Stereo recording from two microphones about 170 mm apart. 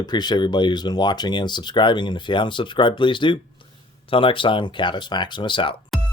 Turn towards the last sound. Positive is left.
turn(degrees=0)  # may be behind; listen again after turning